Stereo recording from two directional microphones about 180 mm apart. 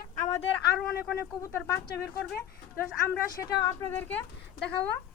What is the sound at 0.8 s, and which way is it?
Speech, 5° left (ahead or behind).